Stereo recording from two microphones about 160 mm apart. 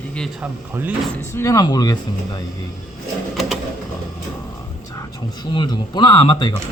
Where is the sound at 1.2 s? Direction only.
20° left (ahead or behind).